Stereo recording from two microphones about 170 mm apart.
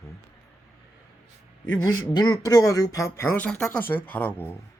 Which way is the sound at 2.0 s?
25° left (ahead or behind).